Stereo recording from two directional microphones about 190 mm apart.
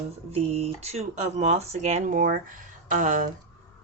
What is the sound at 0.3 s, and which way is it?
Speech, 35° right (ahead or behind).